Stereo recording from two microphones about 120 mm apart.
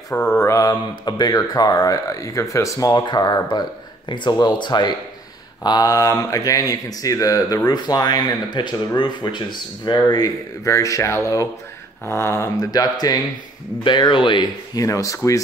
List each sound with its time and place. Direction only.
0.4 s speech: 25° left (ahead or behind); by 14.5 s 40° left (ahead or behind)
14.8 s speech: 30° left (ahead or behind)